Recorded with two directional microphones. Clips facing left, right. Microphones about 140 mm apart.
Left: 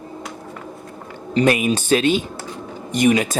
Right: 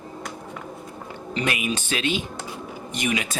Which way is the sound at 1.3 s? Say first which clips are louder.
Left 9 dB; 40° left (ahead or behind).